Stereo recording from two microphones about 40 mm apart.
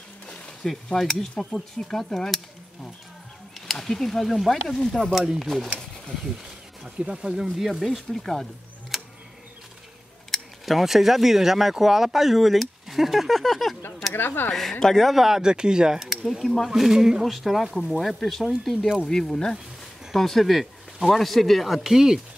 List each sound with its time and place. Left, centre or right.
0.7 s speech: centre
3.6 s speech: centre
5.1 s speech: centre
5.4 s speech: centre
6.8 s speech: centre
7.8 s speech: centre
8.9 s tick: centre
10.6 s speech: centre
14.1 s speech: left
14.5 s speech: centre
15.2 s speech: centre
16.3 s speech: centre
16.7 s speech: centre
20.2 s speech: centre